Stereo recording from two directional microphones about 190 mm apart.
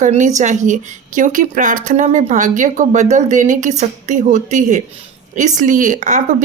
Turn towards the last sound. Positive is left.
turn(degrees=-40)  # may be behind; listen again after turning